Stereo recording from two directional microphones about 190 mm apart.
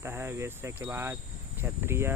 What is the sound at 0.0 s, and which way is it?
Cricket, 10° right (ahead or behind).